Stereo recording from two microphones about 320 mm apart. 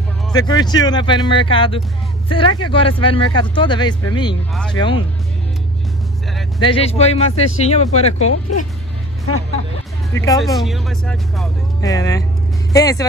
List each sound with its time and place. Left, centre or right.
0.3 s speech: centre
6.6 s speech: centre
8.3 s speech: left
10.1 s speech: centre